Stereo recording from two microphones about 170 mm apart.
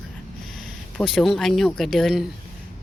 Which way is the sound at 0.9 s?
Centre (ahead or behind).